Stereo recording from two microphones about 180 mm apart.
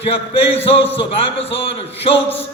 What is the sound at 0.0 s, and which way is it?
A man's voice, 35° left (ahead or behind).